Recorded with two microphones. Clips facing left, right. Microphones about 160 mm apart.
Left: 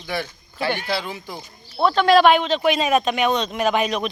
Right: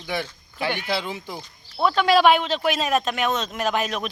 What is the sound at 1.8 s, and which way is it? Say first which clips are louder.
Speech: left 3 dB; 5° right (ahead or behind).